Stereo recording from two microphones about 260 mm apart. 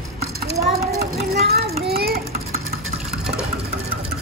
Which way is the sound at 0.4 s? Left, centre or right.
Right.